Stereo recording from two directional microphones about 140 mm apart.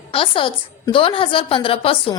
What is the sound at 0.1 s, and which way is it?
A woman's voice, 40° left (ahead or behind).